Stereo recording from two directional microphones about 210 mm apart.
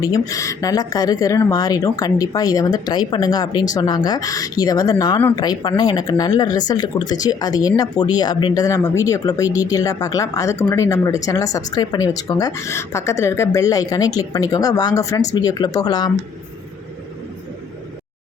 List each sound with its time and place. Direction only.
0.0 s speech: 15° left (ahead or behind)